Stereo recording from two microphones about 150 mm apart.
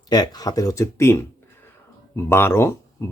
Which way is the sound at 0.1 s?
25° left (ahead or behind).